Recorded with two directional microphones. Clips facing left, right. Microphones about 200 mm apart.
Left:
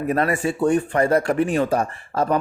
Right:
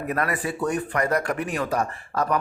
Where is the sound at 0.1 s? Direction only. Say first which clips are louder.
Left 5 dB; 25° left (ahead or behind).